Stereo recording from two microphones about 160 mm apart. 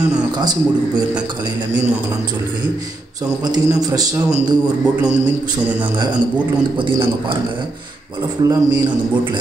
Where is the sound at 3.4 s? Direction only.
25° right (ahead or behind).